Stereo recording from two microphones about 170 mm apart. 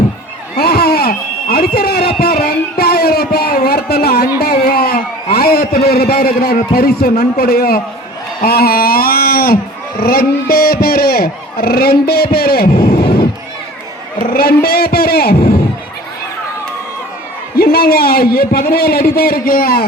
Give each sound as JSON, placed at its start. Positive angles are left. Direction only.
{"t": 0.5, "sound": "a sound", "side_deg": 65}
{"t": 10.0, "sound": "speech", "side_deg": 60}
{"t": 14.2, "sound": "speech", "side_deg": 60}
{"t": 17.6, "sound": "a man's voice", "side_deg": 60}